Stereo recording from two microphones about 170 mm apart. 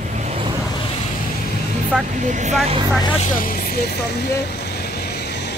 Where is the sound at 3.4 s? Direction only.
60° left (ahead or behind); by 5.5 s 80° left.